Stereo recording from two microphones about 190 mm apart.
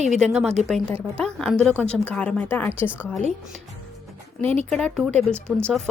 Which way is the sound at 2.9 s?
5° right (ahead or behind).